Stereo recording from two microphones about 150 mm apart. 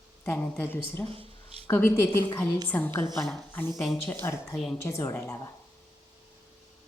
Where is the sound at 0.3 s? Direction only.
10° left (ahead or behind).